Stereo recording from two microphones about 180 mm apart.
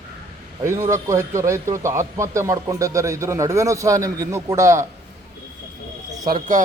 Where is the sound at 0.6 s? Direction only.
15° right (ahead or behind).